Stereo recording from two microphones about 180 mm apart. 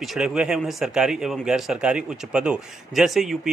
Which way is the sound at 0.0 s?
Centre (ahead or behind).